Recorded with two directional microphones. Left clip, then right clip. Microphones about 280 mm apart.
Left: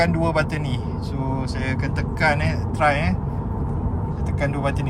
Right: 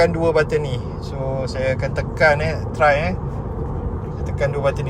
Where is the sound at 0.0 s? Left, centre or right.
Centre.